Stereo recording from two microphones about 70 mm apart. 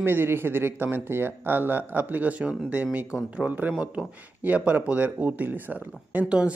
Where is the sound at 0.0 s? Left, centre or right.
Right.